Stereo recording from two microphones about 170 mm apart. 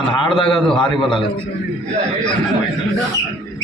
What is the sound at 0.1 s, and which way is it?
Speech, 30° left (ahead or behind).